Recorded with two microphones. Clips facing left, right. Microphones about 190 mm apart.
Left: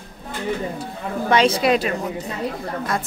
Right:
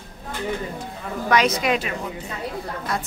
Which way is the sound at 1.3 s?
30° left (ahead or behind).